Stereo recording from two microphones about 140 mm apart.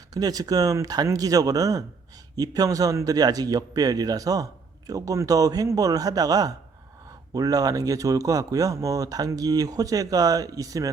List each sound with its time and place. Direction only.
0.1 s speech: 25° right (ahead or behind)